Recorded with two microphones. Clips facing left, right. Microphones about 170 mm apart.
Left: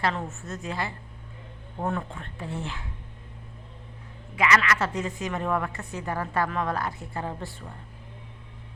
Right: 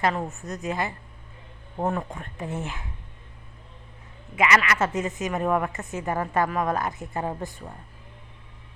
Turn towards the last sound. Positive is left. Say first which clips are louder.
# right 4 dB
turn(degrees=-20)  # may be behind; listen again after turning